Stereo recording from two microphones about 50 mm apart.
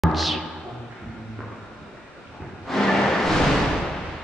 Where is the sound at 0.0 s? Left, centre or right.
Centre.